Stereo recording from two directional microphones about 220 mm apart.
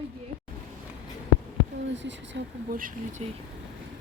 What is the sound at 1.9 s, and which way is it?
Speech, 55° right (ahead or behind).